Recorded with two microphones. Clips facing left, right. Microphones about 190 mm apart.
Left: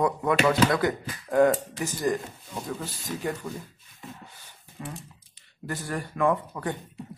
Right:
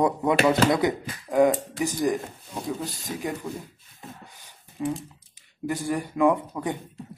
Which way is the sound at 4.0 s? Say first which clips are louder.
Even; 15° right (ahead or behind).